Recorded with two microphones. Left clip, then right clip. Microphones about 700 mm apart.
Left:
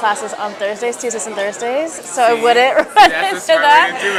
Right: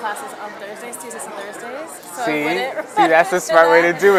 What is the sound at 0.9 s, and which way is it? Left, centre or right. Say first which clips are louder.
Speech: left 11 dB; left.